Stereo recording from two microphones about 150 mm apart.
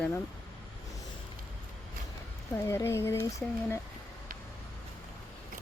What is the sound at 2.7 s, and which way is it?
Speech, 20° left (ahead or behind).